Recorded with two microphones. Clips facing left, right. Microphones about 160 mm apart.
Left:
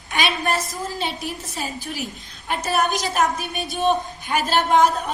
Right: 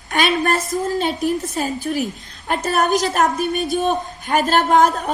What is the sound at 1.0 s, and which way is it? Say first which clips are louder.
A woman's voice: right 8 dB; 45° right (ahead or behind).